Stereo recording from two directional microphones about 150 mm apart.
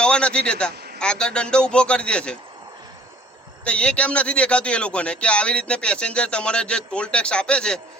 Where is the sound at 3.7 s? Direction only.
10° left (ahead or behind).